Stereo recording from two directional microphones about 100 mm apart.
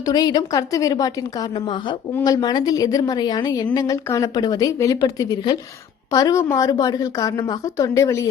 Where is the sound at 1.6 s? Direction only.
55° left (ahead or behind).